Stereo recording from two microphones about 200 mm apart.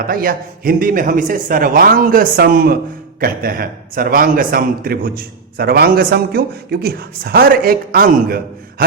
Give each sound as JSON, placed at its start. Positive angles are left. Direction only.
{"t": 0.0, "sound": "a man's voice", "side_deg": -45}